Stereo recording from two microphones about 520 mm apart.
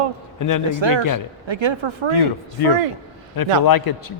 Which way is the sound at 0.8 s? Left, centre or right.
Right.